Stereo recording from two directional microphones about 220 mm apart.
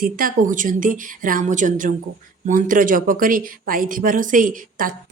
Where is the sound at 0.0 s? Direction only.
40° right (ahead or behind).